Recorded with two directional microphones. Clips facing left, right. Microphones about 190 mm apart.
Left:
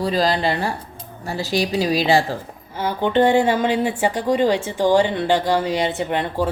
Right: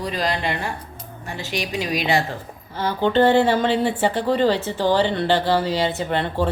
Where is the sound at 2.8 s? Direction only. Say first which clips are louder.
Even; 15° left (ahead or behind).